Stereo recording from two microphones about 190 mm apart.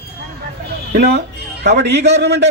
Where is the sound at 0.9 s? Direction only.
60° right (ahead or behind).